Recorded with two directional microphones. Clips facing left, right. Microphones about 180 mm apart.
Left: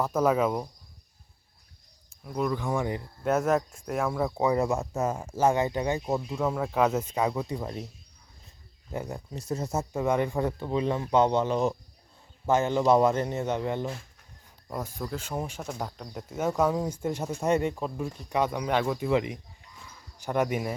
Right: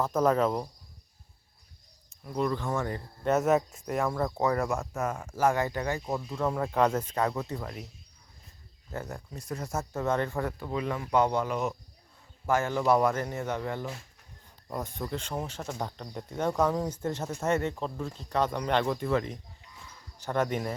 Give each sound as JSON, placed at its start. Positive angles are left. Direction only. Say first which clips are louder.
{"t": 0.0, "sound": "speech", "louder": "left 1 dB", "side_deg": 5}
{"t": 2.2, "sound": "speech", "louder": "left 1 dB", "side_deg": 5}
{"t": 3.2, "sound": "speech", "louder": "even", "side_deg": 0}
{"t": 6.3, "sound": "speech", "louder": "right 2 dB", "side_deg": 5}
{"t": 8.9, "sound": "speech", "louder": "left 3 dB", "side_deg": 15}
{"t": 14.7, "sound": "speech", "louder": "even", "side_deg": 0}